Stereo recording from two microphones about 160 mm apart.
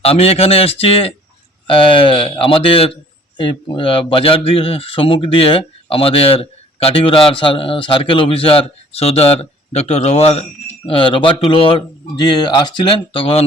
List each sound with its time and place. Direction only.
0.0 s a man's voice: 40° left (ahead or behind)